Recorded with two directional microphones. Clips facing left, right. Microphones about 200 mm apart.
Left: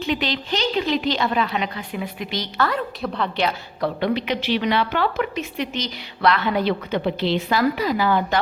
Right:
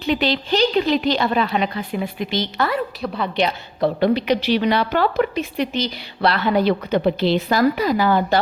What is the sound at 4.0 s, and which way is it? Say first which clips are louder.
A woman's voice: right 5 dB; 35° right (ahead or behind).